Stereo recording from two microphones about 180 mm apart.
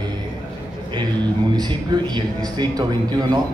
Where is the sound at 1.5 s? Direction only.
25° right (ahead or behind).